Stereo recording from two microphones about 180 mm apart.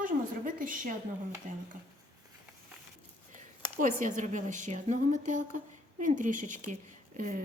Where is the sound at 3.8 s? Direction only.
45° right (ahead or behind).